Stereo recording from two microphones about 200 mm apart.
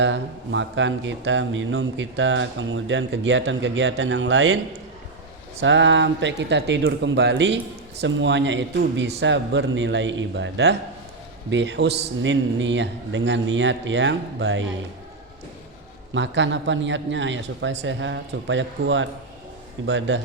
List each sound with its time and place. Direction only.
0.0 s speech: 65° right (ahead or behind)
5.5 s a man's voice: 65° right (ahead or behind)
16.1 s speech: 65° right (ahead or behind)